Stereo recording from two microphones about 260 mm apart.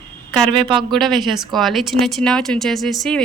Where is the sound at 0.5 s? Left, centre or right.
Centre.